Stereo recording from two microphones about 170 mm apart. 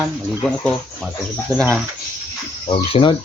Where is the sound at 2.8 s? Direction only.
35° left (ahead or behind).